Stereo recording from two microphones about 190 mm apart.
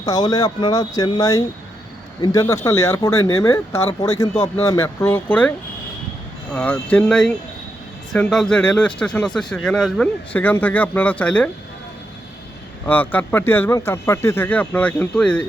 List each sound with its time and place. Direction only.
0.0 s speech: 20° left (ahead or behind)
12.8 s speech: 10° left (ahead or behind)